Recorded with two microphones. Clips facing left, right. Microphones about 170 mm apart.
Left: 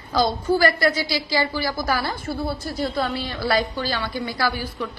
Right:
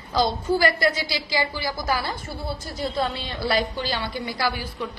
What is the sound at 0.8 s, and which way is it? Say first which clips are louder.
A man's voice: left 2 dB; 20° right (ahead or behind).